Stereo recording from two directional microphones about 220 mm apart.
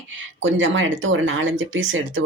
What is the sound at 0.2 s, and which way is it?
Speech, 60° right (ahead or behind).